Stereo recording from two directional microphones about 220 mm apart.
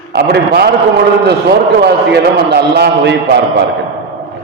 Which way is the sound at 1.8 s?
50° right (ahead or behind).